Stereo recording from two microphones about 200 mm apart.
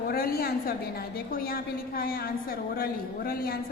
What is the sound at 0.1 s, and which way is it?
A woman's voice, 50° left (ahead or behind).